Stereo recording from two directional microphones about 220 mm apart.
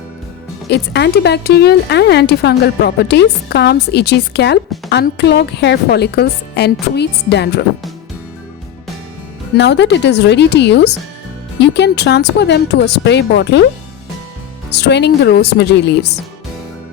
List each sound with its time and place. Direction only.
0.7 s speech: 50° left (ahead or behind)
9.6 s speech: 50° left (ahead or behind)
14.7 s speech: 50° left (ahead or behind)